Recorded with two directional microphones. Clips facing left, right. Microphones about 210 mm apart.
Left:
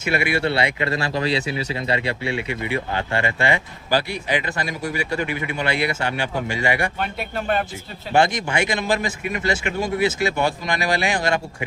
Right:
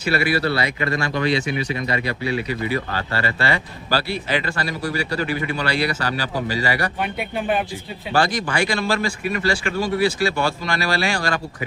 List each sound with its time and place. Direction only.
0.1 s speech: 20° left (ahead or behind)
7.0 s speech: 5° right (ahead or behind)
8.1 s speech: 25° left (ahead or behind)